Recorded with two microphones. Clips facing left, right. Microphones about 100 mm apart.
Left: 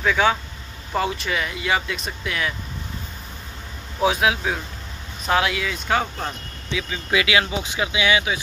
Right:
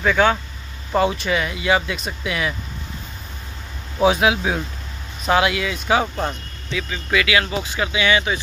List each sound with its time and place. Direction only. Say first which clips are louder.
0.0 s speech: right 2 dB; centre (ahead or behind)
4.0 s speech: right 3 dB; centre (ahead or behind)
6.7 s speech: right 1 dB; 20° left (ahead or behind)